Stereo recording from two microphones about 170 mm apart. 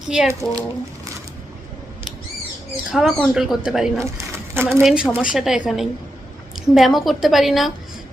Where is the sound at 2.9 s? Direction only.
Centre (ahead or behind).